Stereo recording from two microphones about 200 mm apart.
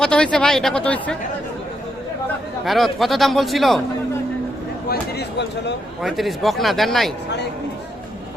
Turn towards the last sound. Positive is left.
turn(degrees=0)  # may be behind; listen again after turning